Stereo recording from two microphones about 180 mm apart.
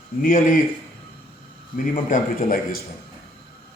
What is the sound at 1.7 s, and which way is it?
Speech, 50° left (ahead or behind).